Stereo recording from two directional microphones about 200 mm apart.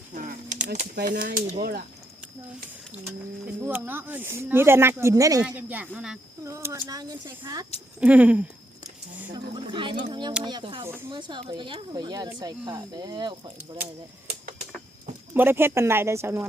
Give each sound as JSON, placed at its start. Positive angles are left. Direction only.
{"t": 0.1, "sound": "a sound", "side_deg": -40}
{"t": 0.9, "sound": "speech", "side_deg": -50}
{"t": 2.9, "sound": "speech", "side_deg": -10}
{"t": 9.6, "sound": "speech", "side_deg": -25}
{"t": 15.4, "sound": "speech", "side_deg": -10}